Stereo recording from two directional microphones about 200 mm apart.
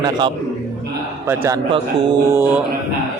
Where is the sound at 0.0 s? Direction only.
25° right (ahead or behind).